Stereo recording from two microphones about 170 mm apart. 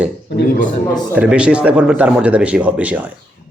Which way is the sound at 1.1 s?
5° right (ahead or behind).